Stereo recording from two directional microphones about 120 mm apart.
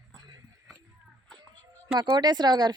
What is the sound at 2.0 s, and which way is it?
Speech, 40° right (ahead or behind).